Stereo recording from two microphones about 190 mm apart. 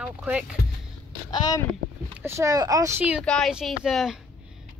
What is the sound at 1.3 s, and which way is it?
Speech, 20° left (ahead or behind).